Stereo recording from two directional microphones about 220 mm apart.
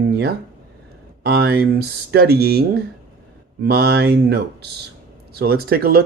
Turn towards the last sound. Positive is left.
turn(degrees=-45)  # may be behind; listen again after turning